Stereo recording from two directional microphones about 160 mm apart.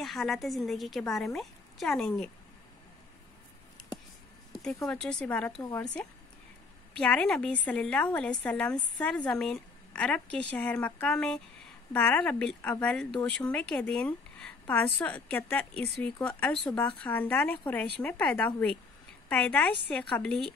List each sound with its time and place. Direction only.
0.0 s a woman's voice: centre (ahead or behind)
4.5 s a sound: centre (ahead or behind)
4.8 s a woman's voice: 5° left (ahead or behind)
5.6 s speech: 20° left (ahead or behind)
7.0 s a woman's voice: 5° left (ahead or behind)